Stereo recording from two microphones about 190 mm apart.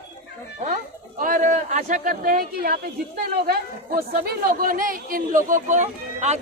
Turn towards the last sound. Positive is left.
turn(degrees=-35)  # may be behind; listen again after turning